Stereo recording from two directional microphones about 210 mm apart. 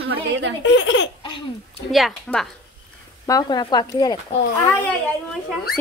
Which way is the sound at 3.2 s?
15° left (ahead or behind).